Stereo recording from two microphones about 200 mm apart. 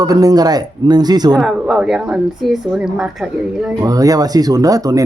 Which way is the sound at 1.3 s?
Centre (ahead or behind).